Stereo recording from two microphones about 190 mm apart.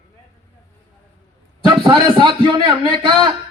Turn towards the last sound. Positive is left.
turn(degrees=-25)  # may be behind; listen again after turning